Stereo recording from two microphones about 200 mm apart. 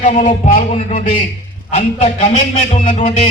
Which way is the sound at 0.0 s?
35° left (ahead or behind).